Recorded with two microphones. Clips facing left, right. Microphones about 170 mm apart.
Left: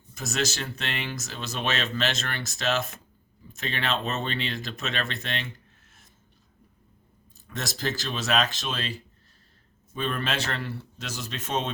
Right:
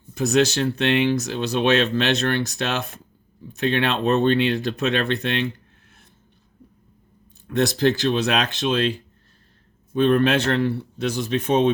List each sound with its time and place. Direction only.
0.3 s speech: 65° right (ahead or behind)
7.4 s speech: 60° right (ahead or behind)